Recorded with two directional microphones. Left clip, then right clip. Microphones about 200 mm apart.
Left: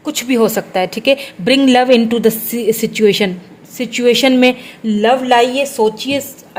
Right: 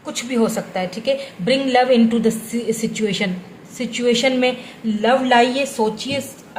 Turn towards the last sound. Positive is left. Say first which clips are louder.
# left 6 dB
turn(degrees=40)  # may be behind; listen again after turning